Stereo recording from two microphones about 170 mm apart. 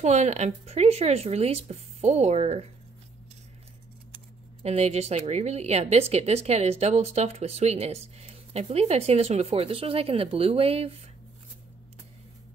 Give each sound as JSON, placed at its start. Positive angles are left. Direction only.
{"t": 0.0, "sound": "a woman's voice", "side_deg": -40}
{"t": 4.6, "sound": "a woman's voice", "side_deg": -40}